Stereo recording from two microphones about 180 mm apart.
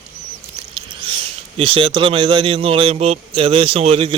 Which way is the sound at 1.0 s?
25° right (ahead or behind).